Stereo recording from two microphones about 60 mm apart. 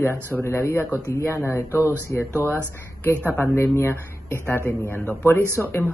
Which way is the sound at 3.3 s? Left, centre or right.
Left.